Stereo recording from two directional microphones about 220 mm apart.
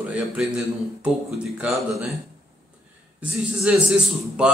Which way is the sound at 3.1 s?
5° right (ahead or behind).